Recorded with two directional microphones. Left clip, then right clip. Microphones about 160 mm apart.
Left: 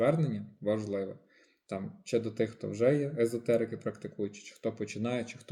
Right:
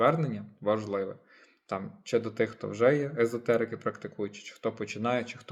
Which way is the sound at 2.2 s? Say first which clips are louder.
Right 3 dB; 25° left (ahead or behind).